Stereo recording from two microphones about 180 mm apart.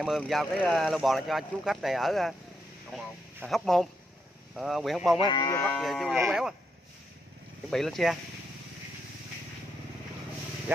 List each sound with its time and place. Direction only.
0.2 s speech: 5° left (ahead or behind)
5.1 s speech: 25° left (ahead or behind)
5.7 s speech: centre (ahead or behind)
6.1 s speech: 10° right (ahead or behind)
7.7 s speech: centre (ahead or behind)